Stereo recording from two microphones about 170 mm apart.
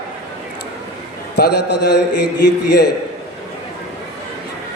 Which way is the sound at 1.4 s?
75° left (ahead or behind).